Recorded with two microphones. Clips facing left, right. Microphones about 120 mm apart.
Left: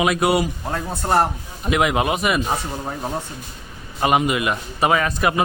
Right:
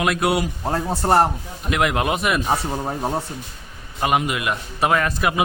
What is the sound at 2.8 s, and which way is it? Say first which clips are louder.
Speech: right 3 dB; 25° right (ahead or behind).